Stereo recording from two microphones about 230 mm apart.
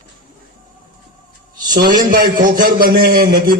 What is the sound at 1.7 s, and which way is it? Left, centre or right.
A man's voice, right.